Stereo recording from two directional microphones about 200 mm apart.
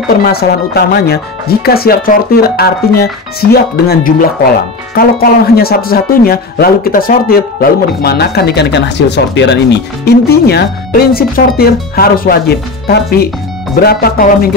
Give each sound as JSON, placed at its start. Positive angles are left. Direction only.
{"t": 0.2, "sound": "speech", "side_deg": 50}